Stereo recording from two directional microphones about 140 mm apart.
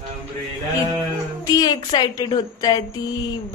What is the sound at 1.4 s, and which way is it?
A woman's voice, 25° left (ahead or behind).